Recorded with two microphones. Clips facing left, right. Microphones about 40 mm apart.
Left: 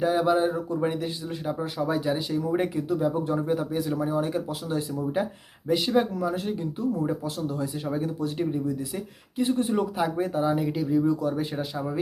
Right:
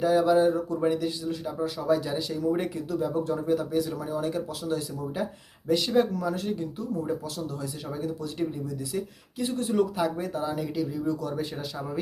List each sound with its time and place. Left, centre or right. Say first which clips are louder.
0.0 s speech: right 1 dB; left